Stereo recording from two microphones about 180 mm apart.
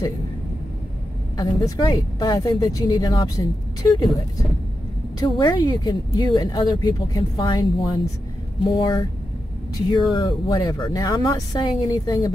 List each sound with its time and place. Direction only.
1.3 s speech: 25° left (ahead or behind)
5.2 s speech: 20° left (ahead or behind)